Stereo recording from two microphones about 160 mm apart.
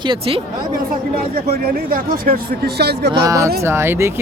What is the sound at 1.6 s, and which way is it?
Speech, 65° right (ahead or behind).